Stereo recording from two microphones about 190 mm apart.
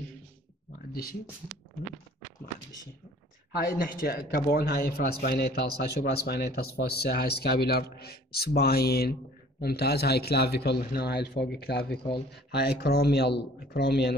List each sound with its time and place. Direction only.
3.5 s a man's voice: 50° left (ahead or behind)